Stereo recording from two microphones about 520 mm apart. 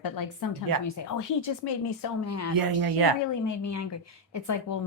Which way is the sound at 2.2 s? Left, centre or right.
Left.